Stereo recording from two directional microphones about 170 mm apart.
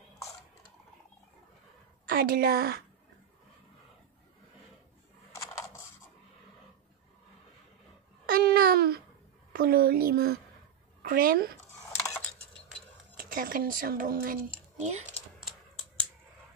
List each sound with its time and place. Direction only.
2.0 s a woman's voice: 60° right (ahead or behind)
5.3 s coin: 15° left (ahead or behind)
8.3 s babbling: 60° right (ahead or behind)
9.5 s a woman's voice: 60° right (ahead or behind)
13.2 s speech: 55° right (ahead or behind)